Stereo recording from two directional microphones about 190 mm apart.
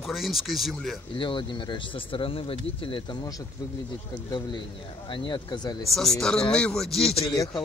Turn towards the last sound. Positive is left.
turn(degrees=20)  # may be behind; listen again after turning